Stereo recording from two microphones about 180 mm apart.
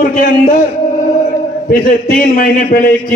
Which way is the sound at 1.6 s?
55° left (ahead or behind).